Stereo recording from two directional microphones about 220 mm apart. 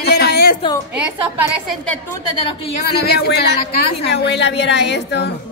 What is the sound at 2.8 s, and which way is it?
A woman's voice, 45° left (ahead or behind).